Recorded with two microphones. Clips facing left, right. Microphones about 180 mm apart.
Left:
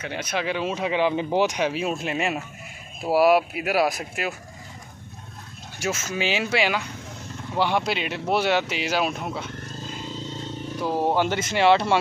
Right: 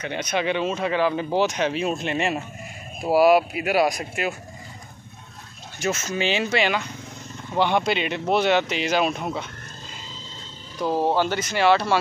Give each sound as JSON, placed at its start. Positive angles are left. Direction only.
{"t": 0.0, "sound": "speech", "side_deg": 5}
{"t": 5.8, "sound": "speech", "side_deg": 5}
{"t": 10.0, "sound": "vehicle", "side_deg": 65}
{"t": 10.8, "sound": "speech", "side_deg": 15}